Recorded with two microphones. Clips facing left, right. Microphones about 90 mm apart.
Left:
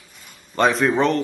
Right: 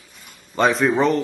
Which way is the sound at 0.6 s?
Centre (ahead or behind).